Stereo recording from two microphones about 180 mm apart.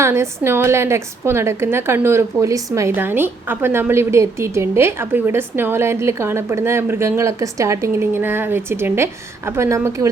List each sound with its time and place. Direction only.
0.0 s a woman's voice: 15° right (ahead or behind)